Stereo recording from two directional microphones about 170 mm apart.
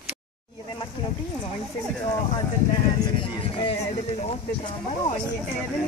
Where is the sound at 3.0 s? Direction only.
30° left (ahead or behind).